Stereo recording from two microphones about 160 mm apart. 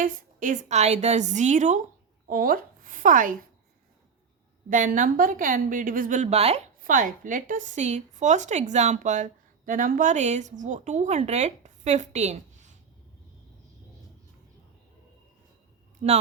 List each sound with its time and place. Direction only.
0.0 s a woman's voice: 55° right (ahead or behind)
2.2 s a woman's voice: 65° right (ahead or behind)
4.7 s a woman's voice: 55° right (ahead or behind)
6.8 s a woman's voice: 55° right (ahead or behind)
16.0 s a woman's voice: 40° right (ahead or behind)